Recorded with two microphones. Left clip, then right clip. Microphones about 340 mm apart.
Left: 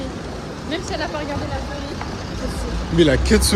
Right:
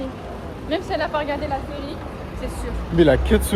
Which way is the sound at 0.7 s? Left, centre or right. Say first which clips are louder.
Right 3 dB; right.